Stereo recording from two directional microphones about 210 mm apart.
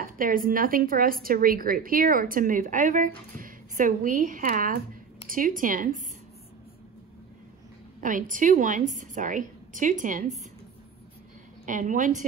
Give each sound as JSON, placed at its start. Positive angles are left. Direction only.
{"t": 0.0, "sound": "a woman's voice", "side_deg": -40}
{"t": 8.0, "sound": "a woman's voice", "side_deg": -40}
{"t": 11.6, "sound": "a woman's voice", "side_deg": -40}